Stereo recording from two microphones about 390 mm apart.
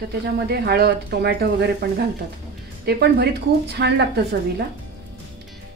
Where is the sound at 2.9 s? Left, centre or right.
Right.